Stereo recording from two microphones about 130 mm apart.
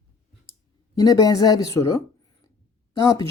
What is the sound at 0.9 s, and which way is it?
Speech, 30° left (ahead or behind).